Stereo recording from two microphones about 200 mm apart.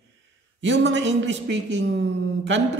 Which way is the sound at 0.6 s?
65° right (ahead or behind).